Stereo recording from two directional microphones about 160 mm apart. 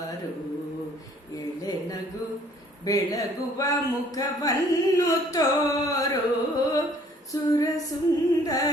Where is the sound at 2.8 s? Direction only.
20° left (ahead or behind).